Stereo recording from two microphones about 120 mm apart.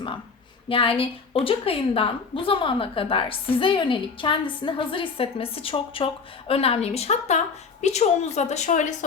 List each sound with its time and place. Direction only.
0.7 s a woman's voice: 50° left (ahead or behind); by 9.0 s 90° left